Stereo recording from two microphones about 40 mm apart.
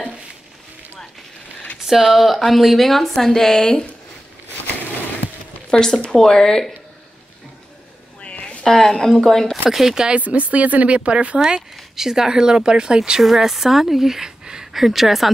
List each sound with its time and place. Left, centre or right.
1.9 s a woman's voice: centre
5.7 s speech: centre
8.2 s a sound: left
8.6 s a woman's voice: centre
9.7 s speech: centre
10.1 s speech: right
11.9 s speech: centre
13.2 s speech: centre
14.7 s a woman's voice: centre